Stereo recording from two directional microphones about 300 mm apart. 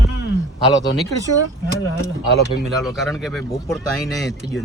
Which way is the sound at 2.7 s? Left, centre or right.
Centre.